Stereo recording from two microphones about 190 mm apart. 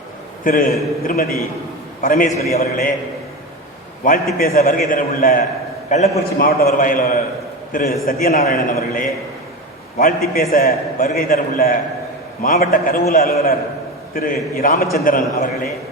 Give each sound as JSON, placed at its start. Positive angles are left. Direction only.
{"t": 0.4, "sound": "a man's voice", "side_deg": 45}
{"t": 4.0, "sound": "a man's voice", "side_deg": 45}